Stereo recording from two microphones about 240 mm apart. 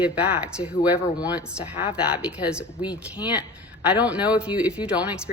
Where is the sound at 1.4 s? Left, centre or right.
Centre.